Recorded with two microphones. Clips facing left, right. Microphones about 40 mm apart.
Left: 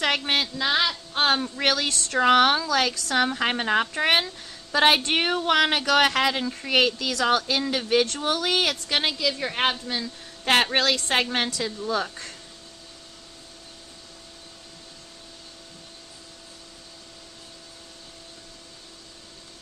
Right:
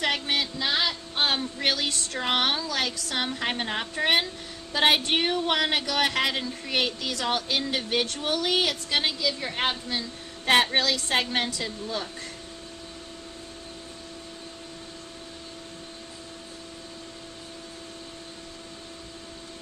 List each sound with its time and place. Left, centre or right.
0.0 s a woman's voice: left
10.5 s a woman's voice: left